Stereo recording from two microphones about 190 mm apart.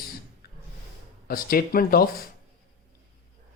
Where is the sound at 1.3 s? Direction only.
50° left (ahead or behind).